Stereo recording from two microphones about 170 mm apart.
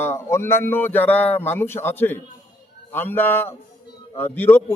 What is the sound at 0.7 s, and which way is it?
A man's voice, 10° left (ahead or behind).